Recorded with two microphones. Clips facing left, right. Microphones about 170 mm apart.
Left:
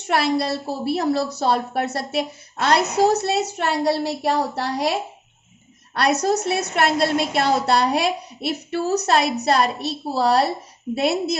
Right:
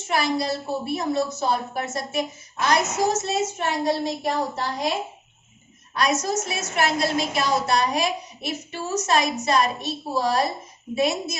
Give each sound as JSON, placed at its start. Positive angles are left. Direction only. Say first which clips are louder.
{"t": 0.1, "sound": "a woman's voice", "louder": "left 3 dB", "side_deg": 65}